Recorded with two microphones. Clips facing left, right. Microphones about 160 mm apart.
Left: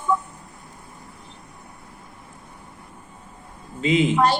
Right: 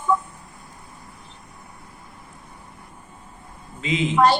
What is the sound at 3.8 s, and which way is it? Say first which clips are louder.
Speech: left 5 dB; 35° left (ahead or behind).